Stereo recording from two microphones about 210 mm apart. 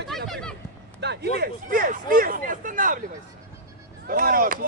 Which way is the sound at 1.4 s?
40° right (ahead or behind).